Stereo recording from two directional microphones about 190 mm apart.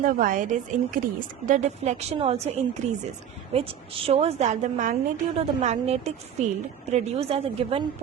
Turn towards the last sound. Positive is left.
turn(degrees=-30)  # may be behind; listen again after turning